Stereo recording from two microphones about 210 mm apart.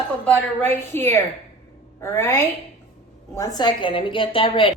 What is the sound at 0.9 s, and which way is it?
A woman's voice, 10° left (ahead or behind).